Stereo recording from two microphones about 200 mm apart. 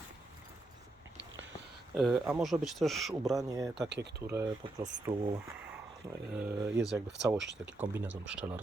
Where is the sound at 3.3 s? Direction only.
15° right (ahead or behind).